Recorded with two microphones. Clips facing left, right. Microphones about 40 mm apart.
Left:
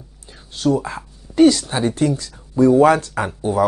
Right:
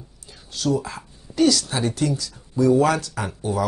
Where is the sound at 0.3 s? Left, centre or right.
Left.